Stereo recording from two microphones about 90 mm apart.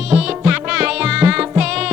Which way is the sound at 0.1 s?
10° right (ahead or behind).